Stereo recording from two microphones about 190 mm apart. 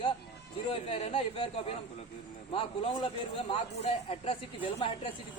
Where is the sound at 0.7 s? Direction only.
30° left (ahead or behind).